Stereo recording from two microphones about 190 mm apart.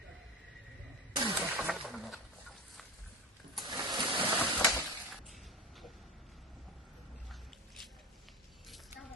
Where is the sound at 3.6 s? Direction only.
25° right (ahead or behind).